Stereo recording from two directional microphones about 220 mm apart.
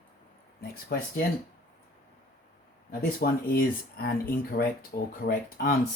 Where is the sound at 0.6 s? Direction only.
40° left (ahead or behind).